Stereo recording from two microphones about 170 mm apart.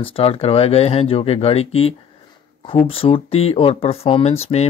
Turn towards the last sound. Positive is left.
turn(degrees=40)  # may be behind; listen again after turning